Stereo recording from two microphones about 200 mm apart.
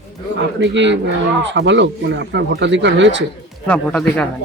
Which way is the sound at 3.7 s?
5° left (ahead or behind).